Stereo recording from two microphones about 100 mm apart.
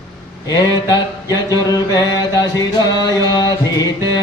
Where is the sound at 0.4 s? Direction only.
40° left (ahead or behind).